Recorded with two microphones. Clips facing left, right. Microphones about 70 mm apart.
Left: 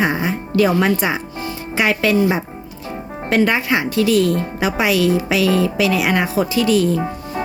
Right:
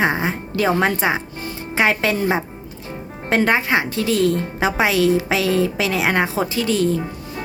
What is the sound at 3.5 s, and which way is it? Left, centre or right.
Speech, right.